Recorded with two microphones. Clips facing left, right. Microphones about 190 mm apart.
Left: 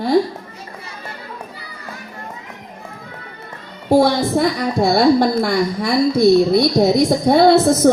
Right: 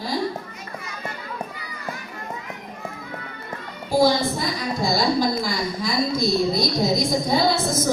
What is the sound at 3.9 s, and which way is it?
A woman's voice, 65° left (ahead or behind).